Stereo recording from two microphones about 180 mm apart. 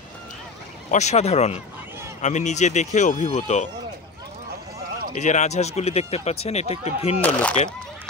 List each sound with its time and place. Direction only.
0.9 s speech: 40° left (ahead or behind)
5.1 s speech: 40° left (ahead or behind)
7.2 s speech: 10° left (ahead or behind)